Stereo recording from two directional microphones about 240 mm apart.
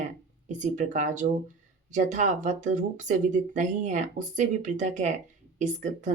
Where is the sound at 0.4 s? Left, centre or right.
Right.